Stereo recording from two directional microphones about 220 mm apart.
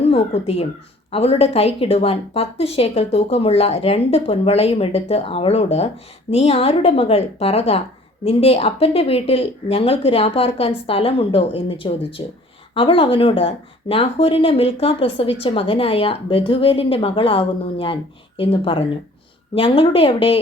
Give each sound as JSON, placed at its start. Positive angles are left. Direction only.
{"t": 0.0, "sound": "a child's voice", "side_deg": 25}